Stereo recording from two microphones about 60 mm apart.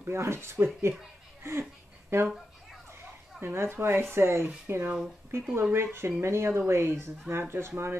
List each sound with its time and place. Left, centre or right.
0.0 s speech: right
1.4 s a sound: right
3.3 s speech: right